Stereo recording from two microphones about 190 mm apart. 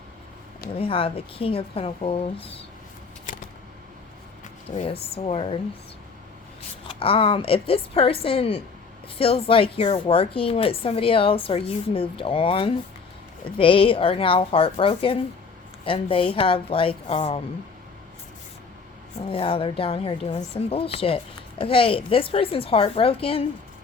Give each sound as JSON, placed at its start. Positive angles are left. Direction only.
{"t": 0.7, "sound": "a woman's voice", "side_deg": 30}
{"t": 3.3, "sound": "a sound", "side_deg": 45}
{"t": 4.9, "sound": "speech", "side_deg": 30}
{"t": 6.8, "sound": "a woman's voice", "side_deg": 30}
{"t": 19.3, "sound": "a woman's voice", "side_deg": 30}